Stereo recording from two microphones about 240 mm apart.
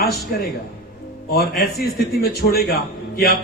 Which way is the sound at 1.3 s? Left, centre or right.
Left.